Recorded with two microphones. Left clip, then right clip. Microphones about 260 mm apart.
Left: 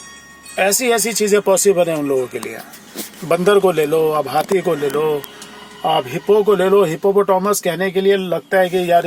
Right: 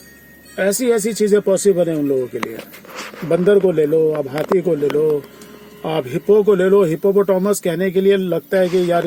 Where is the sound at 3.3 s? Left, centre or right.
Left.